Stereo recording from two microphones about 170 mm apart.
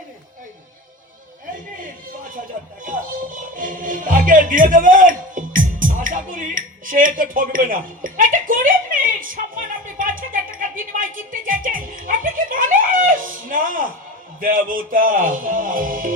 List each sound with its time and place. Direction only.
2.8 s music: 50° right (ahead or behind)
14.4 s speech: 55° right (ahead or behind)